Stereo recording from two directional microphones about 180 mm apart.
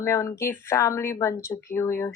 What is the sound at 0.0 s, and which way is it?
Speech, 15° left (ahead or behind).